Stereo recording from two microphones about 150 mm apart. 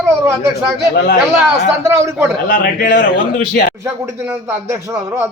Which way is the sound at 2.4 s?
70° left (ahead or behind).